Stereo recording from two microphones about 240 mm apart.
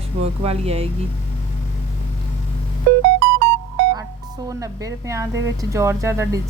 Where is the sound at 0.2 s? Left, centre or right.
Right.